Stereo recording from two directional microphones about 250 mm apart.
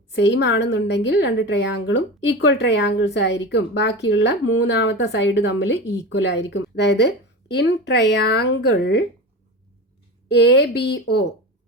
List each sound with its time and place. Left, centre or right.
0.1 s a woman's voice: left
10.2 s a woman's voice: left